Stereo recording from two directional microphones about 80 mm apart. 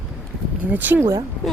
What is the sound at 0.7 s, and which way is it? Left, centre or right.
Speech, right.